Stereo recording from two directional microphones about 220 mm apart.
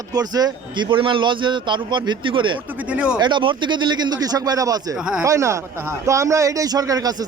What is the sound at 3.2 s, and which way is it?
A man's voice, 20° right (ahead or behind).